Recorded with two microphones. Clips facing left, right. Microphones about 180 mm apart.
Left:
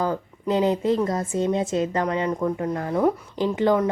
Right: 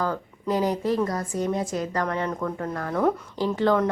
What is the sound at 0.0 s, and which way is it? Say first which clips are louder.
A woman's voice: left 2 dB; 20° left (ahead or behind).